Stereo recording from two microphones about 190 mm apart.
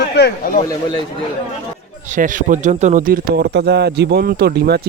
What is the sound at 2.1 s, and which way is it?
Speech, 45° right (ahead or behind).